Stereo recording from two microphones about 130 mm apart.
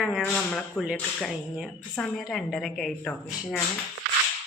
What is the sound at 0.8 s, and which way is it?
Speech, 5° left (ahead or behind).